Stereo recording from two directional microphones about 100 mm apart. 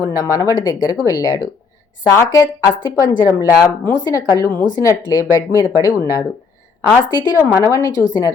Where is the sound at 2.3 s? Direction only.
45° left (ahead or behind).